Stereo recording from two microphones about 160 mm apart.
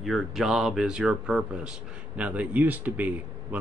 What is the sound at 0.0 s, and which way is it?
Speech, centre (ahead or behind).